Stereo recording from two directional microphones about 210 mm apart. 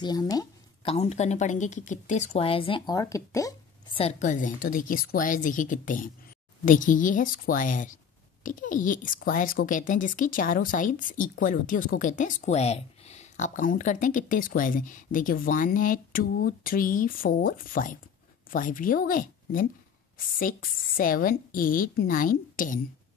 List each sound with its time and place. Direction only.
0.0 s speech: 20° left (ahead or behind)
0.9 s speech: 30° left (ahead or behind); by 4.0 s 15° left (ahead or behind)
4.0 s speech: 35° left (ahead or behind)